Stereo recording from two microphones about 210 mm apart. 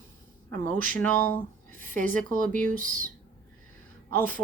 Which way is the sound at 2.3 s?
40° right (ahead or behind).